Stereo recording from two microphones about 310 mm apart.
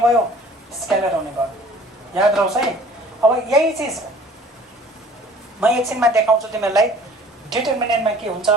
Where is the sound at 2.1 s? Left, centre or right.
Centre.